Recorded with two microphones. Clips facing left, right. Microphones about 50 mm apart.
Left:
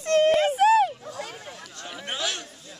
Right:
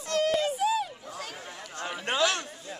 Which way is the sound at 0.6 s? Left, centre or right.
Left.